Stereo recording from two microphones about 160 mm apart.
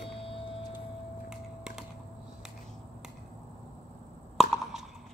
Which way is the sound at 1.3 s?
5° right (ahead or behind).